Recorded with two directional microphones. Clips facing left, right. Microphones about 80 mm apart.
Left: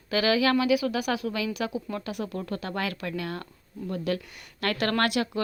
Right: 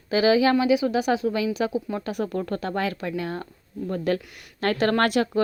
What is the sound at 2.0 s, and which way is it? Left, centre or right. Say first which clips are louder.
Speech: right 5 dB; right.